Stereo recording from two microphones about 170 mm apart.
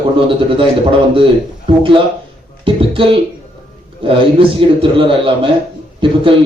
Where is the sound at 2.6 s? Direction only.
30° right (ahead or behind).